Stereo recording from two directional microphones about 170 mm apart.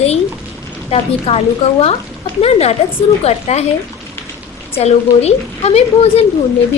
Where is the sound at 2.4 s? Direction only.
40° left (ahead or behind).